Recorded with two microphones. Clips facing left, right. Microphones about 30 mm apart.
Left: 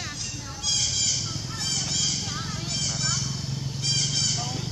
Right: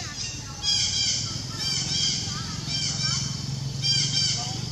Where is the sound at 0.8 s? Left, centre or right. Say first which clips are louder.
Right 1 dB; centre.